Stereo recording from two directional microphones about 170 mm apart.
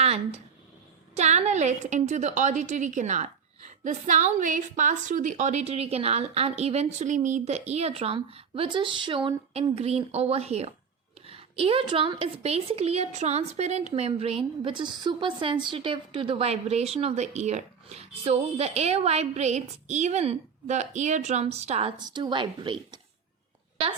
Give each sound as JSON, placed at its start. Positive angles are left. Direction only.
{"t": 1.1, "sound": "a woman's voice", "side_deg": -40}
{"t": 22.0, "sound": "a woman's voice", "side_deg": -25}